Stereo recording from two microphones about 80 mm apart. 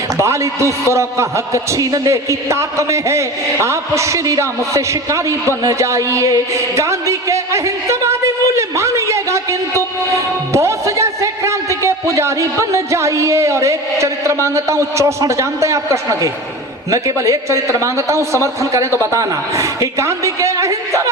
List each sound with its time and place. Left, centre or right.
0.2 s a man's voice: right
8.5 s a sound: right
10.5 s a man's voice: right